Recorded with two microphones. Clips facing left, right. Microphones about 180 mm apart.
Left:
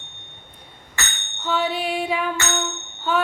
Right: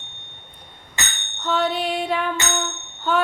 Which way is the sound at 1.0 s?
20° right (ahead or behind).